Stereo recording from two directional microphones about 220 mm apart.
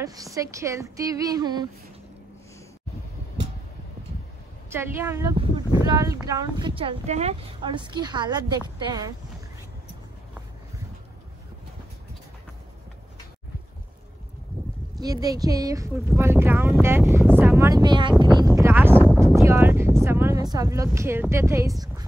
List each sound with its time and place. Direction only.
0.0 s speech: 15° right (ahead or behind)
4.6 s speech: 10° right (ahead or behind)
15.0 s speech: 15° right (ahead or behind)